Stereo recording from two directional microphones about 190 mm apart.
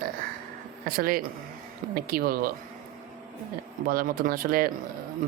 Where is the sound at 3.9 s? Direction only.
50° right (ahead or behind).